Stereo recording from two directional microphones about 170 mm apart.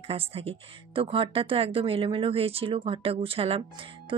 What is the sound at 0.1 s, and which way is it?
Speech, 35° right (ahead or behind).